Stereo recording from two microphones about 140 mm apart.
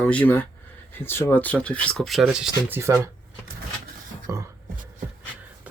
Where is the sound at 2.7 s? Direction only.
20° right (ahead or behind).